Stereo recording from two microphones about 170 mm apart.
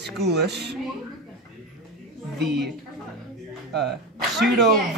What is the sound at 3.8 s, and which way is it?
Sneeze, centre (ahead or behind).